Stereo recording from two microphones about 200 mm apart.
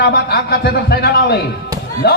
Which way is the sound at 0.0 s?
50° left (ahead or behind).